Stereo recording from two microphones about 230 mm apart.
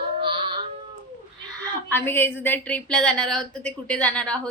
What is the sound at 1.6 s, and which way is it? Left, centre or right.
A woman's voice, centre.